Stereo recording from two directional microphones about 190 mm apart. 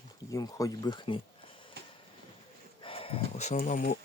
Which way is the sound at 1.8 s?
60° right (ahead or behind).